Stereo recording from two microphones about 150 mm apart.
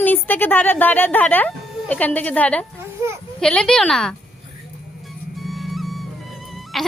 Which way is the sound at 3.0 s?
20° right (ahead or behind).